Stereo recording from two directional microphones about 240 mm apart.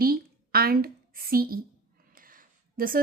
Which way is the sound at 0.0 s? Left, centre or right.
Right.